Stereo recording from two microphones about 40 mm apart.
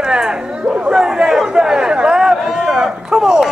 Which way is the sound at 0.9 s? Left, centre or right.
Centre.